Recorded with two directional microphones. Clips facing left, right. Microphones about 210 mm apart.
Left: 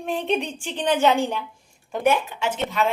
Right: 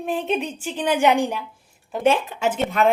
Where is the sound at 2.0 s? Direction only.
30° right (ahead or behind).